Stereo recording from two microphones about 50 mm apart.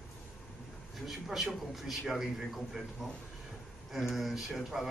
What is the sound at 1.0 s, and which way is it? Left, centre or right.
A man's voice, centre.